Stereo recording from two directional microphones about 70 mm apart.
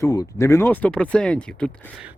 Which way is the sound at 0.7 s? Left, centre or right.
Left.